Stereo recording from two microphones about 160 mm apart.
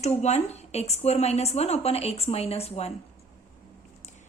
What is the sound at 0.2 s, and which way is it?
A woman's voice, 45° left (ahead or behind).